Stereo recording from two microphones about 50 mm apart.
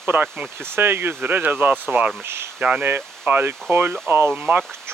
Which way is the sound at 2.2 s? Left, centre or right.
Right.